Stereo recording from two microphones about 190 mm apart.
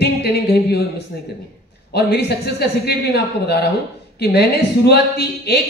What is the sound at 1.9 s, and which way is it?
Speech, 60° left (ahead or behind).